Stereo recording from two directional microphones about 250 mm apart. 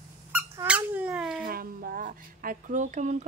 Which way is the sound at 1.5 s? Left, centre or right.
Right.